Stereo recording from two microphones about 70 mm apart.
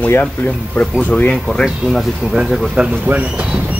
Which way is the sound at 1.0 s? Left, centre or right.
Centre.